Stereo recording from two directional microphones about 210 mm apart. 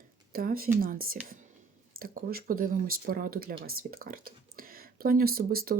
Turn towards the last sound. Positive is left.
turn(degrees=-45)  # may be behind; listen again after turning